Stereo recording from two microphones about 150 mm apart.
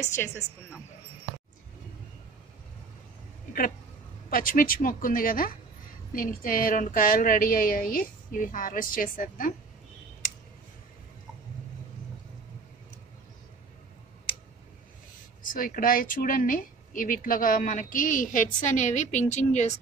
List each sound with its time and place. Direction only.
0.0 s speech: 20° left (ahead or behind)
4.3 s a woman's voice: 70° left (ahead or behind)
15.4 s speech: 65° left (ahead or behind); by 19.8 s 50° left (ahead or behind)